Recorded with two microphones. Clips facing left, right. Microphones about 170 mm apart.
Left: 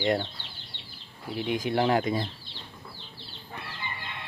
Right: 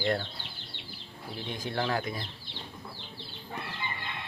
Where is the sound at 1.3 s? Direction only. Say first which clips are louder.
Left 7 dB; 15° left (ahead or behind).